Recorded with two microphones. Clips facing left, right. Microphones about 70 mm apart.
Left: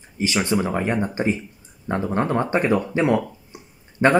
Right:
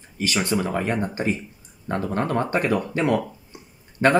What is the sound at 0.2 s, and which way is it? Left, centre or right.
Speech, left.